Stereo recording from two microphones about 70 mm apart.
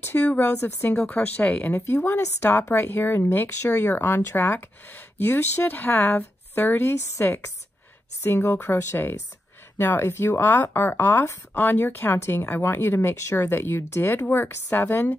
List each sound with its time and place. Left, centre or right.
0.0 s speech: left
0.8 s speech: left
1.7 s speech: left
2.7 s speech: left